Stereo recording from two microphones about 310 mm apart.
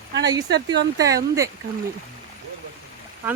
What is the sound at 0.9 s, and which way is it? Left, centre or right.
Speech, centre.